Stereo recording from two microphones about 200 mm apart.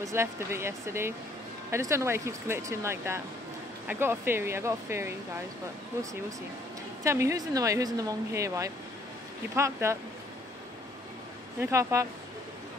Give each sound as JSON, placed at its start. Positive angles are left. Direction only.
{"t": 0.0, "sound": "speech", "side_deg": -15}
{"t": 7.0, "sound": "speech", "side_deg": -15}
{"t": 11.6, "sound": "speech", "side_deg": -15}